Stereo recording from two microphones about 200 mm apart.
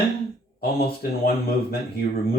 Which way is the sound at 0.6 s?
50° left (ahead or behind).